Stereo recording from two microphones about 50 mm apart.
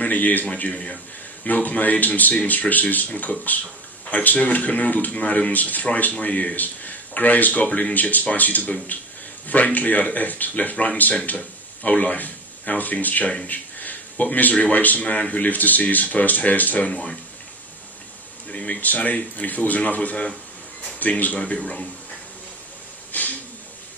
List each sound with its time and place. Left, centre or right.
0.0 s a man's voice: left
0.5 s speech: left
16.9 s speech: centre
18.5 s speech: left
23.1 s a sound: left